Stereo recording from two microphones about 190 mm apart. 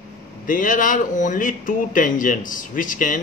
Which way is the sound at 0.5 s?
45° left (ahead or behind).